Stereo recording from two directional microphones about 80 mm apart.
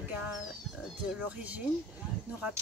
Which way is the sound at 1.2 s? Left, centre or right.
Centre.